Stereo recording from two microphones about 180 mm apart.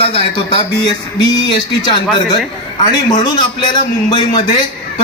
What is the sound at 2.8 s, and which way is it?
A man's voice, 25° left (ahead or behind).